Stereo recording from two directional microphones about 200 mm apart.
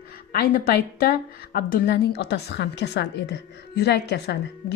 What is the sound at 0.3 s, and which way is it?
A woman's voice, 50° left (ahead or behind).